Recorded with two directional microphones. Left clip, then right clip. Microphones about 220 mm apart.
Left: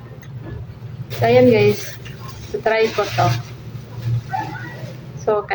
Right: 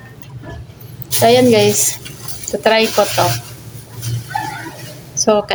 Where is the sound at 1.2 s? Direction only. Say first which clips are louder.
Right 3 dB; 50° right (ahead or behind).